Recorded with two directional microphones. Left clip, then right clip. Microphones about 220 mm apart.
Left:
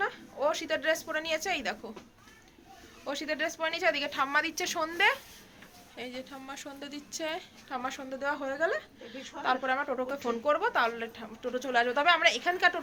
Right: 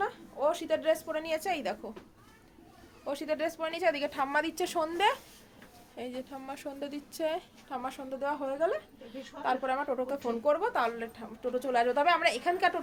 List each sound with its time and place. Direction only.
0.0 s a woman's voice: 5° right (ahead or behind)
3.1 s a woman's voice: 10° right (ahead or behind); by 7.3 s 40° right (ahead or behind)
7.7 s a woman's voice: 10° right (ahead or behind)